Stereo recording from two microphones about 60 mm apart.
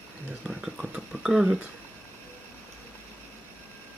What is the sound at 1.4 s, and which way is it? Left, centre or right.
Speech, centre.